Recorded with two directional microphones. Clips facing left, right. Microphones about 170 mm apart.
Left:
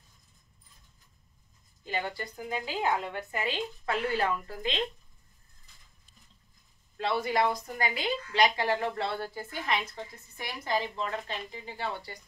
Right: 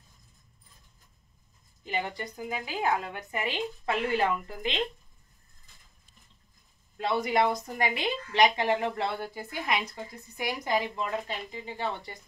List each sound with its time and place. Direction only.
1.9 s speech: 20° right (ahead or behind)
7.1 s a woman's voice: 20° right (ahead or behind)